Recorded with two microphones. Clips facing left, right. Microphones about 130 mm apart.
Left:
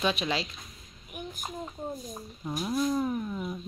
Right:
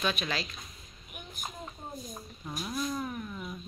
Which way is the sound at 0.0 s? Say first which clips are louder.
Left 4 dB; 25° left (ahead or behind).